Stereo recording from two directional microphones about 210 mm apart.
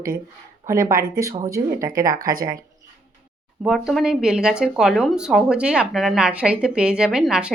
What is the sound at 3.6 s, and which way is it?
Speech, centre (ahead or behind).